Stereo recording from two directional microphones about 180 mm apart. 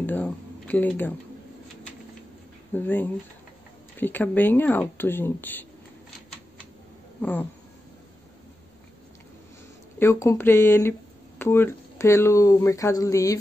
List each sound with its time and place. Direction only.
0.0 s speech: 10° left (ahead or behind)
2.7 s speech: 10° left (ahead or behind)
7.2 s speech: 10° left (ahead or behind)
9.9 s speech: 15° left (ahead or behind)